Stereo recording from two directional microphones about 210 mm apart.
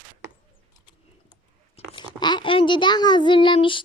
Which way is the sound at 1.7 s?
20° left (ahead or behind).